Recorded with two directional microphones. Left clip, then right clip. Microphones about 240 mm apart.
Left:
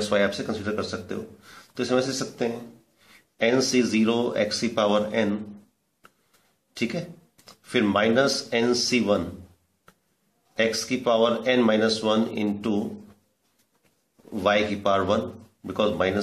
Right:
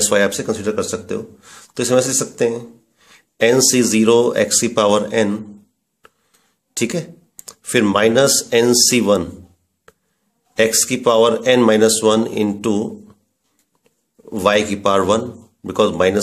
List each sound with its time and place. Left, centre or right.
0.1 s speech: right
6.7 s speech: right
10.5 s speech: right
14.3 s speech: right